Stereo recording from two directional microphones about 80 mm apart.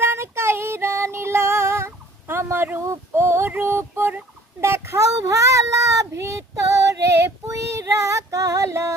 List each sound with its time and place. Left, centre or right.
0.0 s female singing: right
2.8 s a sound: right
3.5 s female singing: right
4.6 s child singing: right